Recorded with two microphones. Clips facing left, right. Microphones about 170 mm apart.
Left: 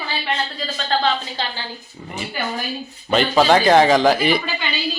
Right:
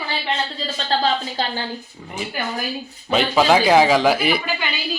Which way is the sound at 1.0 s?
40° right (ahead or behind).